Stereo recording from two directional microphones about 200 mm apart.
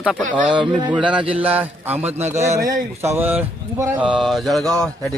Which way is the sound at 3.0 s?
10° right (ahead or behind).